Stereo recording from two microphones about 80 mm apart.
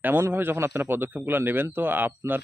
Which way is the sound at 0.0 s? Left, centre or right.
Right.